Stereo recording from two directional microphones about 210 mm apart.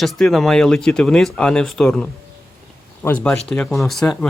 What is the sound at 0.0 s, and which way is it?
Speech, centre (ahead or behind).